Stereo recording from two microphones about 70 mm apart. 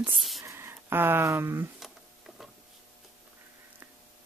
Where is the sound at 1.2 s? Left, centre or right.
Right.